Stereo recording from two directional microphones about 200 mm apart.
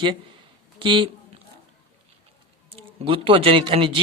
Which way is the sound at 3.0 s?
25° right (ahead or behind).